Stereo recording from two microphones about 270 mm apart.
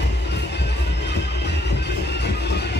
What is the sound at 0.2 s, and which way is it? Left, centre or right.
Music, left.